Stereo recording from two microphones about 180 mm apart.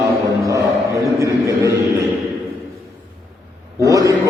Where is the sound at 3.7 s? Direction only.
20° right (ahead or behind).